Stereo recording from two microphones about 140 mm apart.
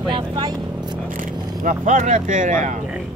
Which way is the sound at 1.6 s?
70° right (ahead or behind).